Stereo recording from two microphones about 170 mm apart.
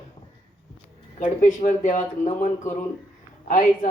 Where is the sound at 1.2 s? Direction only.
45° left (ahead or behind).